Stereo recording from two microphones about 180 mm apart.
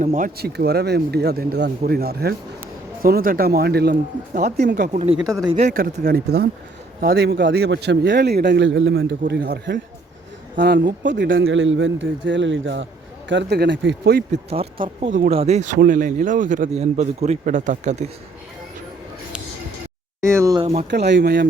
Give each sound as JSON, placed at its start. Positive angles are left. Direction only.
{"t": 0.0, "sound": "a man's voice", "side_deg": -45}
{"t": 0.3, "sound": "a man's voice", "side_deg": -60}
{"t": 5.2, "sound": "speech", "side_deg": -20}
{"t": 5.5, "sound": "a man's voice", "side_deg": -45}
{"t": 14.3, "sound": "a man's voice", "side_deg": -35}
{"t": 20.2, "sound": "speech", "side_deg": -15}
{"t": 20.9, "sound": "a man's voice", "side_deg": -70}